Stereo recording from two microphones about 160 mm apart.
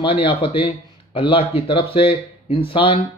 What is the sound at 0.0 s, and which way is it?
Speech, 35° left (ahead or behind).